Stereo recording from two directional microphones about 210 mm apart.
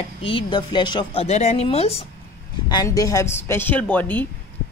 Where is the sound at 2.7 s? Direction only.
15° left (ahead or behind).